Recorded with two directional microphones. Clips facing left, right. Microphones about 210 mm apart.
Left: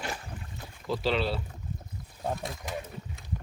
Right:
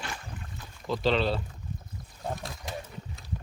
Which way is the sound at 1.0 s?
10° left (ahead or behind).